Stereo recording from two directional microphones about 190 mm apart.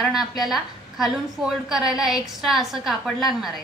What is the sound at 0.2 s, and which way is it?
Speech, 20° left (ahead or behind).